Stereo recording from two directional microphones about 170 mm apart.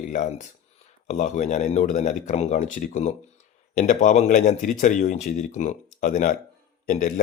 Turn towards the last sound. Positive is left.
turn(degrees=50)  # may be behind; listen again after turning